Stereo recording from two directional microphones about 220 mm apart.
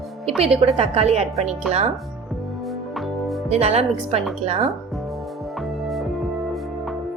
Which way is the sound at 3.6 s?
30° right (ahead or behind).